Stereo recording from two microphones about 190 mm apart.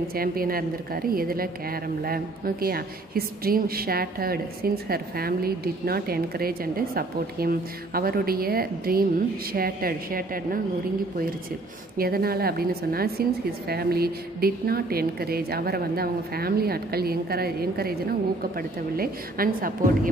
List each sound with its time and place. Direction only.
0.1 s a woman's voice: 50° right (ahead or behind)
12.0 s a woman's voice: 55° right (ahead or behind)